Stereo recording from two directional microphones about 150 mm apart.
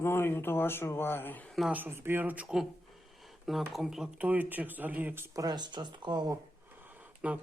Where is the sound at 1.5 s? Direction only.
10° right (ahead or behind).